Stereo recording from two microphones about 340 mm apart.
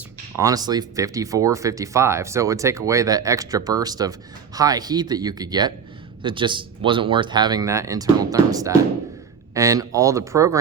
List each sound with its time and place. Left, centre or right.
0.3 s speech: centre